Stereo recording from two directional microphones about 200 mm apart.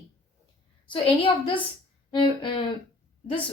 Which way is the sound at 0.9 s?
25° left (ahead or behind).